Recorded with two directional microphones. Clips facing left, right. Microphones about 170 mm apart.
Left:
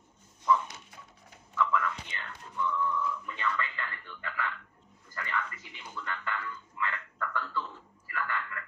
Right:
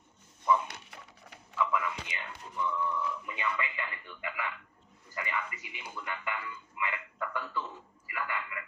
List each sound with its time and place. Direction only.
0.7 s dog: 70° right (ahead or behind)
1.5 s a sound: 15° right (ahead or behind)
2.6 s radio: 20° right (ahead or behind)
5.1 s music: 15° right (ahead or behind)